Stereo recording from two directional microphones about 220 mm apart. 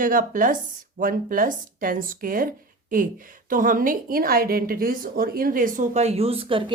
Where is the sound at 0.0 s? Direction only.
40° right (ahead or behind).